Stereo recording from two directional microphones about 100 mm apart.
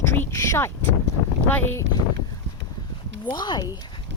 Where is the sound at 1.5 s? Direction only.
15° left (ahead or behind).